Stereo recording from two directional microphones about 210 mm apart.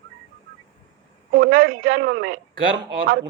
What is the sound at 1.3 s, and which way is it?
A woman's voice, 45° right (ahead or behind).